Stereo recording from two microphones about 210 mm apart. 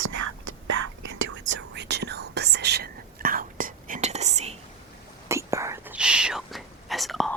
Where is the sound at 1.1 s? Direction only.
60° right (ahead or behind); by 4.6 s 30° right (ahead or behind).